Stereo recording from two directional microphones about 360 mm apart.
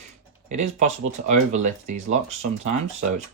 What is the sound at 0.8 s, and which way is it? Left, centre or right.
Speech, centre.